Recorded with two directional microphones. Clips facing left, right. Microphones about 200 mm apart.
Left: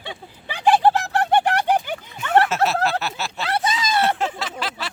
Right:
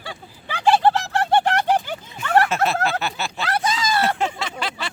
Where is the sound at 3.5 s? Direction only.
25° left (ahead or behind).